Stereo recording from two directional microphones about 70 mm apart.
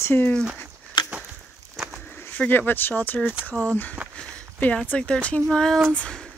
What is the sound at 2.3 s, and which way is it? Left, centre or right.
Speech, left.